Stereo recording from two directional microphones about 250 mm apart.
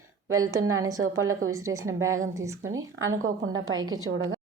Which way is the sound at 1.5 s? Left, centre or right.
Centre.